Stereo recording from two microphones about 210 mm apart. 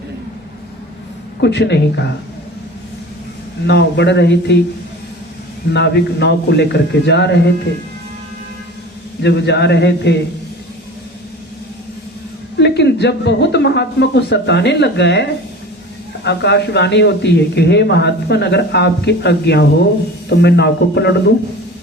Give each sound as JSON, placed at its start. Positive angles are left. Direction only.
{"t": 1.4, "sound": "a man's voice", "side_deg": 55}
{"t": 3.7, "sound": "a man's voice", "side_deg": 55}
{"t": 5.7, "sound": "speech", "side_deg": 55}
{"t": 9.2, "sound": "speech", "side_deg": 55}
{"t": 12.5, "sound": "speech", "side_deg": 55}